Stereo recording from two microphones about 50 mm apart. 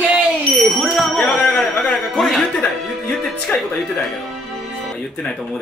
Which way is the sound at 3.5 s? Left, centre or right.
Left.